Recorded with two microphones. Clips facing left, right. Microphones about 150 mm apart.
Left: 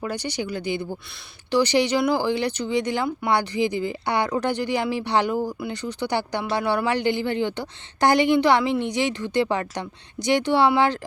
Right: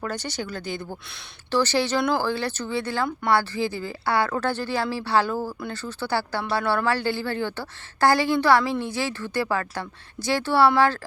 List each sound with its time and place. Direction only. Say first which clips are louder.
0.0 s a woman's voice: left 2 dB; 10° left (ahead or behind)